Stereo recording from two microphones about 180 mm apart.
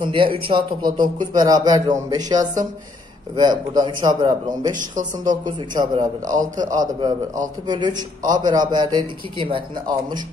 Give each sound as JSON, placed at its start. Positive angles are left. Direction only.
{"t": 0.0, "sound": "a man's voice", "side_deg": -25}
{"t": 4.7, "sound": "speech", "side_deg": -45}
{"t": 6.7, "sound": "a man's voice", "side_deg": -25}